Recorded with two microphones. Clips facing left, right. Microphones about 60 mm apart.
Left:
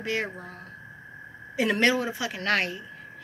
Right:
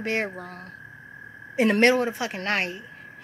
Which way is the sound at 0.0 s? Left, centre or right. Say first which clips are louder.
Right 3 dB; right.